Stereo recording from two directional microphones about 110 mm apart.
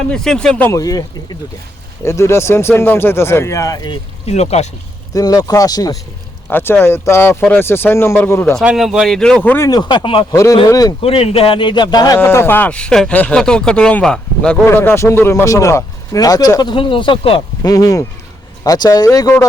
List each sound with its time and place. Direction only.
0.1 s speech: 5° left (ahead or behind)
0.7 s speech: 30° left (ahead or behind)
4.3 s speech: 80° left
5.1 s speech: 35° left (ahead or behind)
6.5 s speech: 20° left (ahead or behind)
8.6 s speech: 5° right (ahead or behind); by 9.6 s 15° left (ahead or behind)
9.6 s speech: 35° left (ahead or behind)
10.0 s speech: 55° left (ahead or behind)
10.3 s speech: 30° left (ahead or behind)
11.0 s speech: 60° left (ahead or behind); by 12.1 s 40° left (ahead or behind)
12.1 s speech: 25° left (ahead or behind); by 14.5 s 10° left (ahead or behind)
14.5 s speech: 20° left (ahead or behind); by 17.4 s 50° left (ahead or behind)
17.6 s speech: 35° left (ahead or behind)